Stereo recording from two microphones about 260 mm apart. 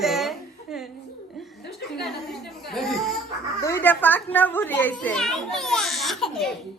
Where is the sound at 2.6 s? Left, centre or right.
Centre.